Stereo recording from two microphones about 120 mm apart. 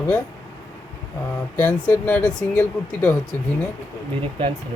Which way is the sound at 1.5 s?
10° left (ahead or behind).